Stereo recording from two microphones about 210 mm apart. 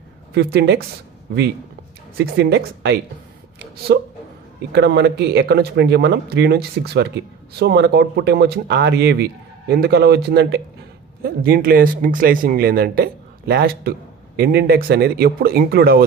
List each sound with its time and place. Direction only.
0.3 s speech: 50° right (ahead or behind)
2.1 s speech: 50° right (ahead or behind)